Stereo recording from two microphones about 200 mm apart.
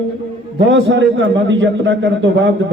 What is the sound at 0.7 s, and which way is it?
A man's voice, 70° right (ahead or behind).